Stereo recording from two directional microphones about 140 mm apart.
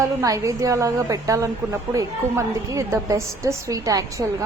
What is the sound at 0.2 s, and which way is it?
A woman's voice, 20° right (ahead or behind).